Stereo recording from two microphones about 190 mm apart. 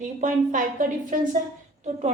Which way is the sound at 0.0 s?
40° right (ahead or behind).